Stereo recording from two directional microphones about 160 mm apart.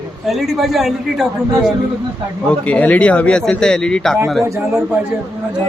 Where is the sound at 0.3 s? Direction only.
Centre (ahead or behind).